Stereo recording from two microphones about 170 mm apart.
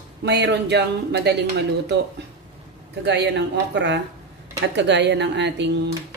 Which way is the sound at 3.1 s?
85° right.